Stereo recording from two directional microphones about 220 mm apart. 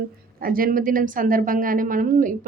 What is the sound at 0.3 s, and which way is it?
A woman's voice, 40° right (ahead or behind).